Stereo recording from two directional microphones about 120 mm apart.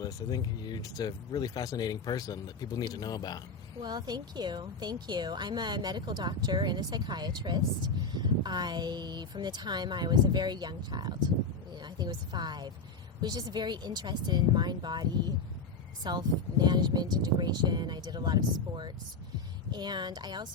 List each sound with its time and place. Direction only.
0.0 s speech: 35° left (ahead or behind)
3.8 s a woman's voice: 35° right (ahead or behind)
16.0 s a woman's voice: 35° right (ahead or behind)
19.7 s a woman's voice: 35° right (ahead or behind)